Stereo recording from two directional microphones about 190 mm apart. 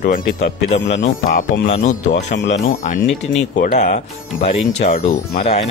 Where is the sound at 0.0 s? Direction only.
45° left (ahead or behind).